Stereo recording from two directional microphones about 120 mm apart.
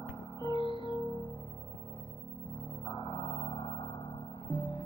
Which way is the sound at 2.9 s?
40° left (ahead or behind).